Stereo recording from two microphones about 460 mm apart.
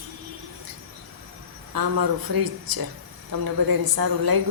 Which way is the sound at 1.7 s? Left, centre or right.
Right.